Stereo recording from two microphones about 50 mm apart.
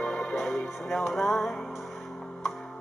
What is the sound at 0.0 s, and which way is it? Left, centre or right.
Music, centre.